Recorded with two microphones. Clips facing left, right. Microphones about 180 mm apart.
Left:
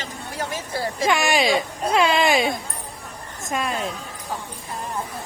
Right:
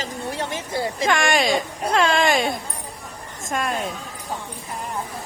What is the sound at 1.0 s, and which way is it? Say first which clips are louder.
Speech: left 1 dB; 5° left (ahead or behind).